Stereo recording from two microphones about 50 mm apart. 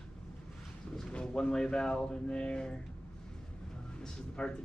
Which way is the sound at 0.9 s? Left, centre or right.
Centre.